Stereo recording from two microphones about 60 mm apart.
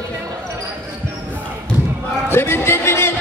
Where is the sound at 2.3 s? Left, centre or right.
Left.